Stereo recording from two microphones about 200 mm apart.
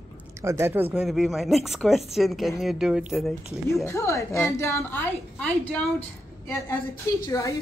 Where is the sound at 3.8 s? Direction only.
15° left (ahead or behind).